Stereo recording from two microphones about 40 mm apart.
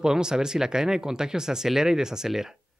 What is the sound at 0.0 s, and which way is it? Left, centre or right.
Speech, centre.